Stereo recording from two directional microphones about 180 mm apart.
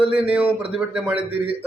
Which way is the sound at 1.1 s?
30° right (ahead or behind).